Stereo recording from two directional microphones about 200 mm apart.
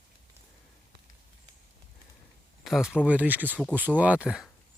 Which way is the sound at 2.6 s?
Centre (ahead or behind).